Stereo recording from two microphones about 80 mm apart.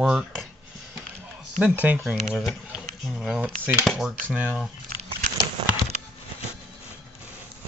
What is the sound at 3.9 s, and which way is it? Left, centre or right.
Speech, centre.